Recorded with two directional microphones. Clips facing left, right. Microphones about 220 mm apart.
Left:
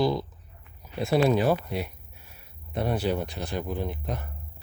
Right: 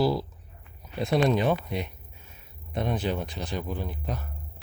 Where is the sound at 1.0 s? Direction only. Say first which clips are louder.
Left 1 dB; 5° left (ahead or behind).